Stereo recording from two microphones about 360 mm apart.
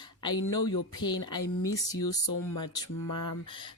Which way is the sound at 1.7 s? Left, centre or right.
Centre.